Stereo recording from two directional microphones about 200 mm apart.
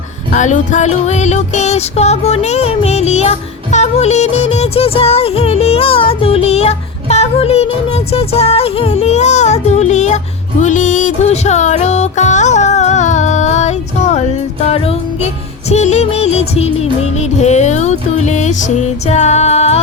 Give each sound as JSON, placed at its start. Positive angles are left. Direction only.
{"t": 0.3, "sound": "music", "side_deg": 40}